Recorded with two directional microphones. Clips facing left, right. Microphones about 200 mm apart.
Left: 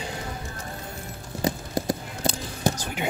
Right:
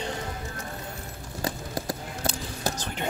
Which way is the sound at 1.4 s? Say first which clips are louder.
Left 5 dB; 20° left (ahead or behind).